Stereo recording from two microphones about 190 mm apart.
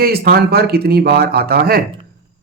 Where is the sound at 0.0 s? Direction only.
55° right (ahead or behind).